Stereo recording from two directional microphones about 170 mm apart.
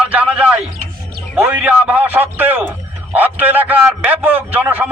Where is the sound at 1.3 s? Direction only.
10° right (ahead or behind).